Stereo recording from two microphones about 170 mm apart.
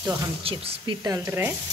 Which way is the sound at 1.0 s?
15° right (ahead or behind).